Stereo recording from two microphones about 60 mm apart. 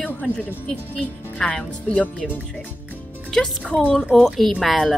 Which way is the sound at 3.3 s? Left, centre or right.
Centre.